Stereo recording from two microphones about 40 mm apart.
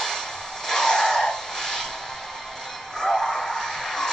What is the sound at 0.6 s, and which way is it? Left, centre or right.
Vehicle, centre.